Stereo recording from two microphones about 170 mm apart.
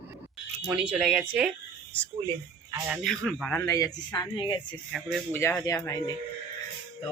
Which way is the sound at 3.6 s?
20° left (ahead or behind).